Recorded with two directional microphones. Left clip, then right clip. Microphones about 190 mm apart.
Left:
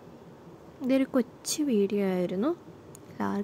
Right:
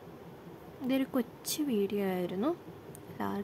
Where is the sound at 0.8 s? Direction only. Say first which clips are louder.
Left 6 dB; 15° left (ahead or behind).